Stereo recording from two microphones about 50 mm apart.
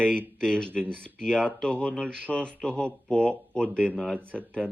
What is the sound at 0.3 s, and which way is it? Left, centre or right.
Speech, centre.